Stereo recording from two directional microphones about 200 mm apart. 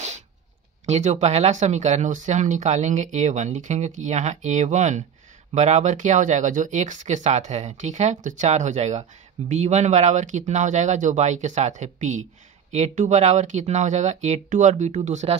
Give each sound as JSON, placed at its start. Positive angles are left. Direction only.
{"t": 0.8, "sound": "speech", "side_deg": -35}